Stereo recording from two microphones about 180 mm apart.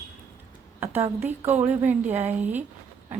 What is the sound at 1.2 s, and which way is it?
A woman's voice, 10° right (ahead or behind).